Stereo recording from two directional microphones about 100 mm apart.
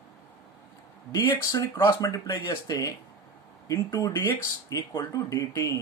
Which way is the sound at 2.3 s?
45° left (ahead or behind).